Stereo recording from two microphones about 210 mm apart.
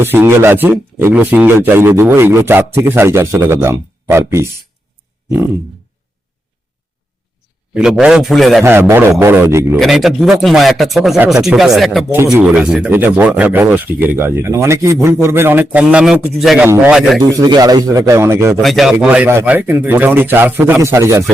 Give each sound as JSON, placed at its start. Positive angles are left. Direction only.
{"t": 0.0, "sound": "a man's voice", "side_deg": -10}
{"t": 7.7, "sound": "speech", "side_deg": -5}
{"t": 8.6, "sound": "a man's voice", "side_deg": -10}
{"t": 9.7, "sound": "a man's voice", "side_deg": 0}
{"t": 17.2, "sound": "a man's voice", "side_deg": -15}
{"t": 18.6, "sound": "a man's voice", "side_deg": 0}